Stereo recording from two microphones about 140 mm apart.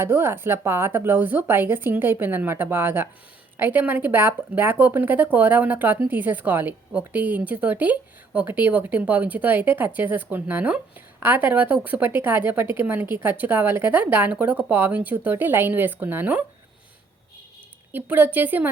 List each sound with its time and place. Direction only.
0.0 s speech: 15° right (ahead or behind)
17.9 s speech: 15° right (ahead or behind)